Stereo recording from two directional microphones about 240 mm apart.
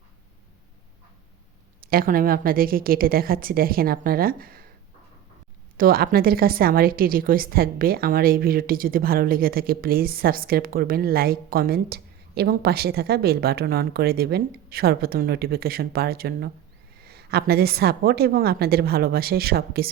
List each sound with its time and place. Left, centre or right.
1.8 s a woman's voice: right
5.7 s a woman's voice: right